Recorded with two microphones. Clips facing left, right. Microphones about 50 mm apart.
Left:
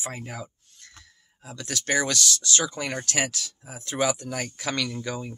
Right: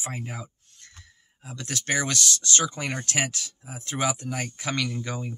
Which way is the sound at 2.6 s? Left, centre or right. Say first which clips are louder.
Even; centre.